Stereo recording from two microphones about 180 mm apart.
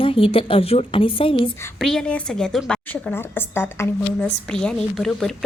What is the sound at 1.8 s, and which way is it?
A woman's voice, 5° left (ahead or behind).